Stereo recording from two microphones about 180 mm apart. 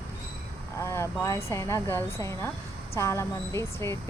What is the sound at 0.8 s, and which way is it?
A woman's voice, 15° left (ahead or behind).